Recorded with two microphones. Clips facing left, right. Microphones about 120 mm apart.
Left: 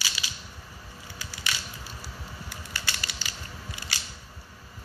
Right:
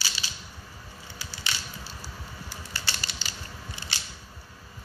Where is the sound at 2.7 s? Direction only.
30° right (ahead or behind).